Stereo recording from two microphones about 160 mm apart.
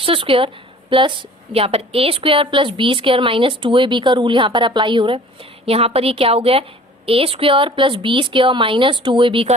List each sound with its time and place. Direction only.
0.0 s a woman's voice: 35° right (ahead or behind)